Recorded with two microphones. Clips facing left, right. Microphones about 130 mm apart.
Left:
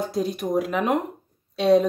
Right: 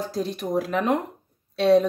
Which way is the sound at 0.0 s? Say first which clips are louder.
Left 2 dB; centre (ahead or behind).